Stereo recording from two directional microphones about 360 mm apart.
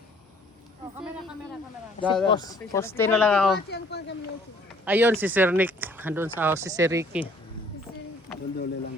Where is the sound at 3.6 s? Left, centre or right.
Left.